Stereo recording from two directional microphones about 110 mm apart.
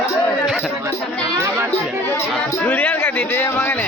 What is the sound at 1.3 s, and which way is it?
Music, 25° right (ahead or behind).